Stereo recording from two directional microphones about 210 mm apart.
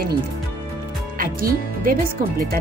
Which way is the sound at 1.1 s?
40° right (ahead or behind).